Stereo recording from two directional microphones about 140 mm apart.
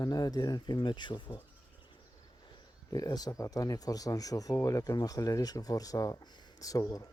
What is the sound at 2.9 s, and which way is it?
Speech, 30° left (ahead or behind).